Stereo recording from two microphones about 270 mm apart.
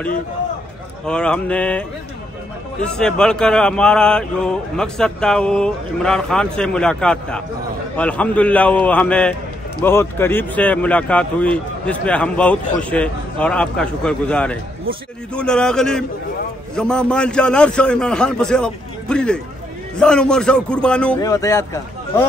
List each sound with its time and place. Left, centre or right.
1.0 s speech: centre